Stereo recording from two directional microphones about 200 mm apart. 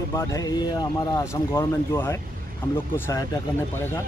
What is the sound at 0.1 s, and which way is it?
Speech, 15° left (ahead or behind).